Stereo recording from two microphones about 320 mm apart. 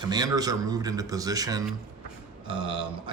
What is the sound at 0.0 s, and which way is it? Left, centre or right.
Speech, centre.